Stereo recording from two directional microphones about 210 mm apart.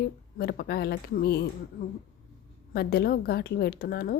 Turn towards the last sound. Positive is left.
turn(degrees=45)  # may be behind; listen again after turning